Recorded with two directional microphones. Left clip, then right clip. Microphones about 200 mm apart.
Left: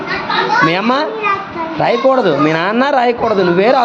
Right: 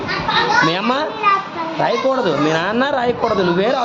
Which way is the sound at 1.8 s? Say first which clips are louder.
Left 5 dB; 15° left (ahead or behind).